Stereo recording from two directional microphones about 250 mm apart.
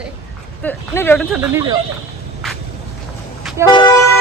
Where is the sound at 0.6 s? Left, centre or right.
Centre.